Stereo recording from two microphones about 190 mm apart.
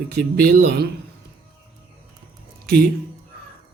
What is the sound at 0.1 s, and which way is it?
Speech, 55° right (ahead or behind).